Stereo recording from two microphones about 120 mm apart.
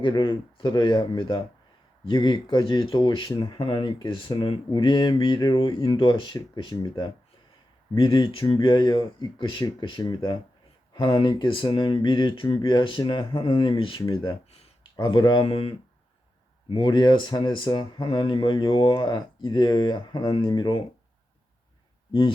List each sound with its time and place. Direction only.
0.0 s speech: 45° left (ahead or behind)